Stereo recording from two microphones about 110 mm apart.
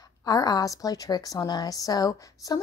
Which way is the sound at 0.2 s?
35° left (ahead or behind).